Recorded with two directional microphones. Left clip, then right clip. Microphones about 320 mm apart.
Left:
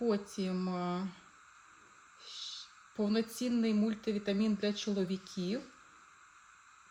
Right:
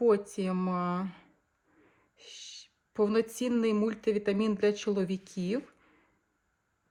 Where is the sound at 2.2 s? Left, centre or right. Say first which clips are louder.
Left 2 dB; right.